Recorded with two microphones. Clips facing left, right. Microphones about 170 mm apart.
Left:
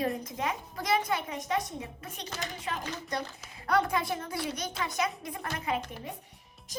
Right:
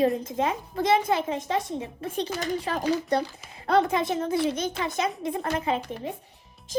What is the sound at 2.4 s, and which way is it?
Speech, 40° right (ahead or behind).